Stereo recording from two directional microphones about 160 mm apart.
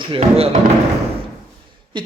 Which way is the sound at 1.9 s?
30° right (ahead or behind).